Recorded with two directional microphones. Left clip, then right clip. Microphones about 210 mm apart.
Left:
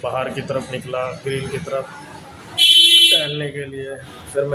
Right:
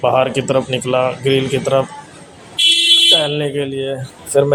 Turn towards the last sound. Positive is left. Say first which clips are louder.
# right 8 dB
turn(degrees=-25)  # may be behind; listen again after turning